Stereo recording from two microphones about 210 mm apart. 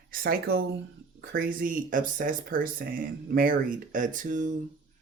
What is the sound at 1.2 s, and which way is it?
Speech, 45° right (ahead or behind).